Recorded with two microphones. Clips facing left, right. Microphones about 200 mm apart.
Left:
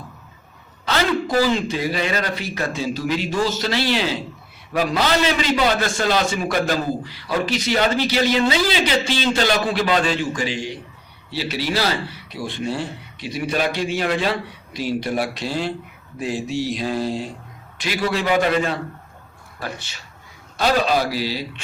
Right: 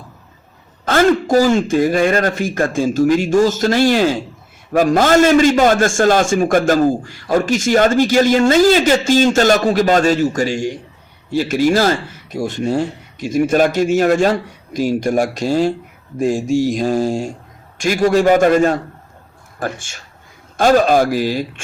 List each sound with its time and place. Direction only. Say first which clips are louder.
0.9 s a man's voice: right 8 dB; 45° right (ahead or behind)